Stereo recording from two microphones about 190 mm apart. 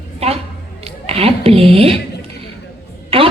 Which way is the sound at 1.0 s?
30° right (ahead or behind).